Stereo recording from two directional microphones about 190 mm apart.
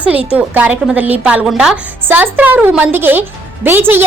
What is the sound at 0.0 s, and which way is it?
A woman's voice, 10° right (ahead or behind).